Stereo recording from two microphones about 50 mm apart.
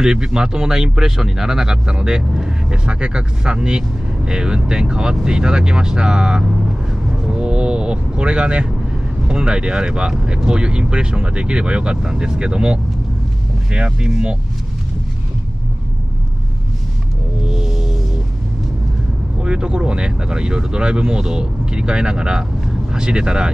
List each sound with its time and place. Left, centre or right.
0.0 s speech: centre
7.2 s vehicle: right
9.3 s speech: centre
17.5 s music: centre
19.4 s speech: centre